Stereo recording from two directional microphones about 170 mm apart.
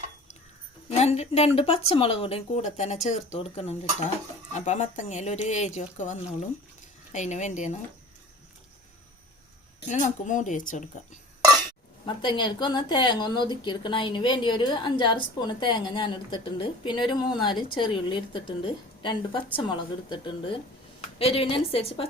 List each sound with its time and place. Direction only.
0.9 s speech: 40° left (ahead or behind)
9.9 s speech: 45° left (ahead or behind)
12.0 s a woman's voice: 25° left (ahead or behind)